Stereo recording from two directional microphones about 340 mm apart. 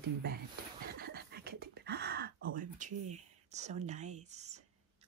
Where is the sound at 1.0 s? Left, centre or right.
Right.